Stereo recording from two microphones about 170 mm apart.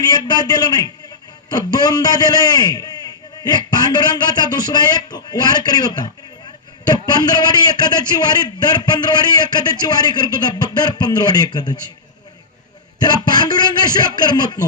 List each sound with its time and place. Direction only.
0.3 s a man's voice: 25° left (ahead or behind)
13.0 s a man's voice: 25° left (ahead or behind)